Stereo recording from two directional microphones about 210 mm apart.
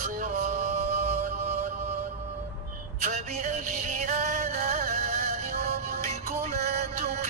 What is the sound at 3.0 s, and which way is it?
Music, 35° right (ahead or behind).